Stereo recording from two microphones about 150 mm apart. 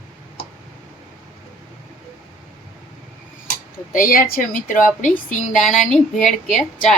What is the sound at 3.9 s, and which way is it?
Speech, 65° left (ahead or behind).